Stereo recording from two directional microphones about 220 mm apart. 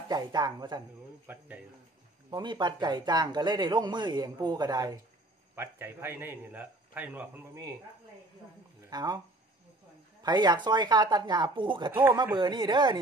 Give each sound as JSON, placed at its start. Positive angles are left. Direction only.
{"t": 0.1, "sound": "speech", "side_deg": -20}
{"t": 2.3, "sound": "a man's voice", "side_deg": -20}
{"t": 8.9, "sound": "speech", "side_deg": -15}
{"t": 10.2, "sound": "a man's voice", "side_deg": -20}
{"t": 12.0, "sound": "a man's voice", "side_deg": -10}